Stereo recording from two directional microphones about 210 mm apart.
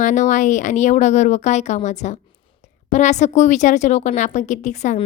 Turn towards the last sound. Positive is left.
turn(degrees=35)  # may be behind; listen again after turning